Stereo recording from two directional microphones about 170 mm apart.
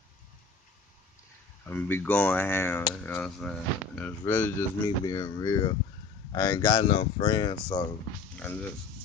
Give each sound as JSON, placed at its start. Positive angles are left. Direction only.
{"t": 1.7, "sound": "speech", "side_deg": 10}